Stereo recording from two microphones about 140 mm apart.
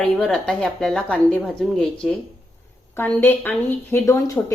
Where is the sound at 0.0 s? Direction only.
5° left (ahead or behind).